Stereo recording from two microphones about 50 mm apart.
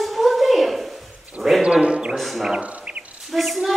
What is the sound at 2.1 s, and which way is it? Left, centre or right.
A man's voice, centre.